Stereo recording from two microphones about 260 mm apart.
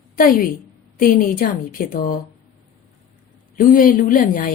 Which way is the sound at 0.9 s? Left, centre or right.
Left.